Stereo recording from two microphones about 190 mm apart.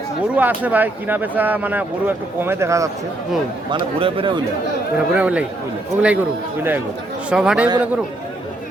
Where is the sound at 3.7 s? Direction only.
25° right (ahead or behind).